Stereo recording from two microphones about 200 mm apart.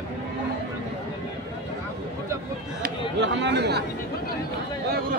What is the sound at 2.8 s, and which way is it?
Speech, 60° right (ahead or behind).